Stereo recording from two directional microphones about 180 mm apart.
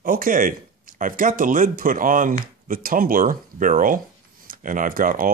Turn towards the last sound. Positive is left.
turn(degrees=-50)  # may be behind; listen again after turning